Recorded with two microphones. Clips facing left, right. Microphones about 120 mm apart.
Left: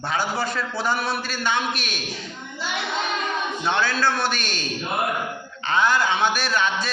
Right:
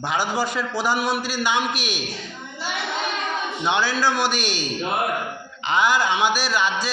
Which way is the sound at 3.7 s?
15° right (ahead or behind).